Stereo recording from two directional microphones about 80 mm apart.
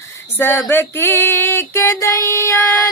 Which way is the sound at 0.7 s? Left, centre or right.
Left.